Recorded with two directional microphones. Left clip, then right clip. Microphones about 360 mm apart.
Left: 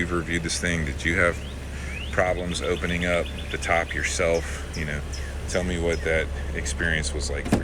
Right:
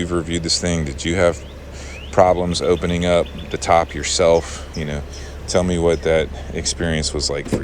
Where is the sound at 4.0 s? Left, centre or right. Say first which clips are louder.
Right 8 dB; centre.